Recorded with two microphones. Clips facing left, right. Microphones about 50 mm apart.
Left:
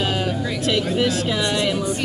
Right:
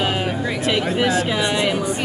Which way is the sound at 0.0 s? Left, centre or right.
Centre.